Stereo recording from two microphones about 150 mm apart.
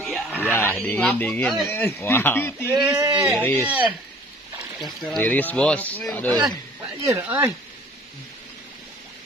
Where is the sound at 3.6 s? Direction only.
10° right (ahead or behind).